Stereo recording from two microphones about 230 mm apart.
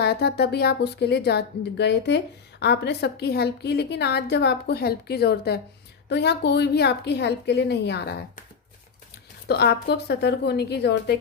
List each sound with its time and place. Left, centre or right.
0.0 s a woman's voice: left
9.5 s a woman's voice: left